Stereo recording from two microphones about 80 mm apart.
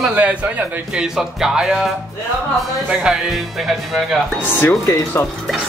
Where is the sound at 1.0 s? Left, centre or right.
Centre.